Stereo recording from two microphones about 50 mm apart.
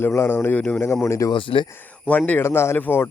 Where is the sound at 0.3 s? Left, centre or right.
Left.